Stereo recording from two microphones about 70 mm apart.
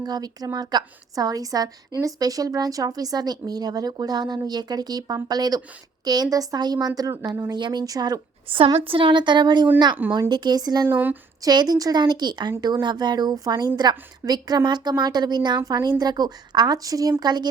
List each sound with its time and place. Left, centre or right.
0.0 s a woman's voice: right
7.5 s a woman's voice: right
9.1 s a woman's voice: right
10.8 s speech: right
11.4 s speech: right
13.4 s a woman's voice: right
15.6 s a woman's voice: right